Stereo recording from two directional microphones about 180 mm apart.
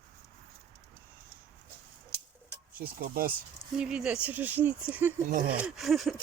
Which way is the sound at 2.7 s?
50° right (ahead or behind).